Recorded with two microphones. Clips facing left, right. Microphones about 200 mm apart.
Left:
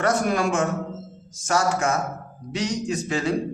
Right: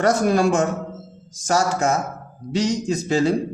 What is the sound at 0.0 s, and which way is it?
A man's voice, 35° right (ahead or behind).